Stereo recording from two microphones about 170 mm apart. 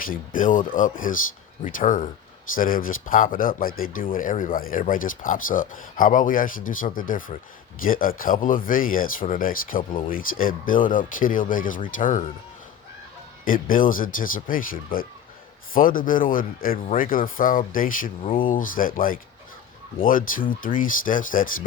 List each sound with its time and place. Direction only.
0.1 s speech: 50° left (ahead or behind)
13.4 s speech: 55° left (ahead or behind)
18.2 s speech: 35° left (ahead or behind)
18.4 s speech: 55° left (ahead or behind)